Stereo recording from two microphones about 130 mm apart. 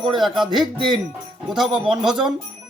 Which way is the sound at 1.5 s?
5° right (ahead or behind).